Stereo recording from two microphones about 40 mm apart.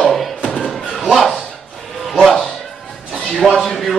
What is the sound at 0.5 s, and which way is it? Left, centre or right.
Slam, centre.